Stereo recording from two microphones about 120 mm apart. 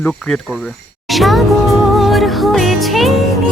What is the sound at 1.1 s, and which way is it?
Music, centre (ahead or behind).